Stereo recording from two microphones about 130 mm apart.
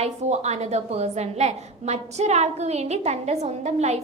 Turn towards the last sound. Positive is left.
turn(degrees=-60)  # may be behind; listen again after turning